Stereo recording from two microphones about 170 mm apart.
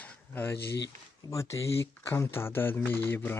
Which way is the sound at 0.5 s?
80° left.